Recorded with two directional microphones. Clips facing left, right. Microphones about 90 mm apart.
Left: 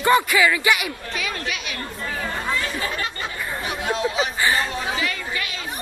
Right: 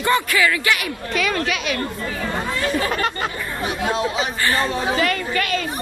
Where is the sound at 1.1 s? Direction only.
70° right (ahead or behind).